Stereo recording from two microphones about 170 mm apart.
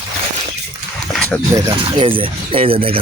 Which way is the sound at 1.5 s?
25° right (ahead or behind).